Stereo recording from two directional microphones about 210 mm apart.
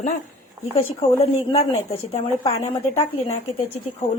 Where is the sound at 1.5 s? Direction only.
30° left (ahead or behind).